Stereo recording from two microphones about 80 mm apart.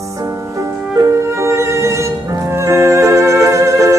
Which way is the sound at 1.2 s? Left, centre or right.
Right.